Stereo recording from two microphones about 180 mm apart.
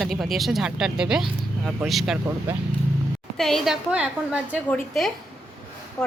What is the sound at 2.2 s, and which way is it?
Speech, 15° right (ahead or behind).